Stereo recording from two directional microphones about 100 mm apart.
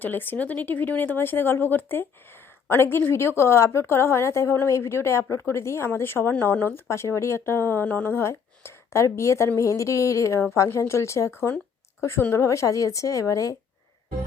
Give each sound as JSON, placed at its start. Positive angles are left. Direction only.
{"t": 0.0, "sound": "a woman's voice", "side_deg": 20}